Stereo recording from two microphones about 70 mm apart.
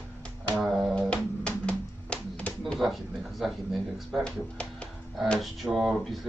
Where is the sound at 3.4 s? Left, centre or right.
Centre.